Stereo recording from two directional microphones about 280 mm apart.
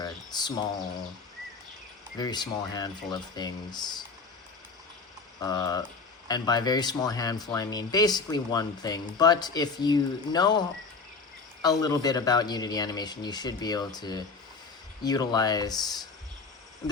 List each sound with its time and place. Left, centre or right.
0.0 s a sound: centre
2.1 s speech: centre
5.4 s speech: centre
11.6 s speech: centre